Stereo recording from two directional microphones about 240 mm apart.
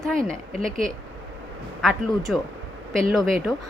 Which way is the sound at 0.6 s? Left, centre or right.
Right.